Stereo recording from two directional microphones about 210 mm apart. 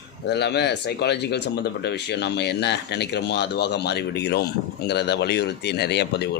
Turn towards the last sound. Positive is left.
turn(degrees=50)  # may be behind; listen again after turning